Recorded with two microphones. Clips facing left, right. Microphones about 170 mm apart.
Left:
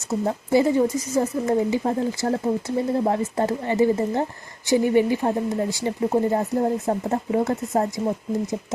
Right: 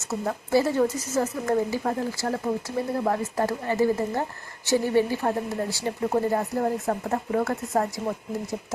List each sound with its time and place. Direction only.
0.1 s speech: 15° left (ahead or behind)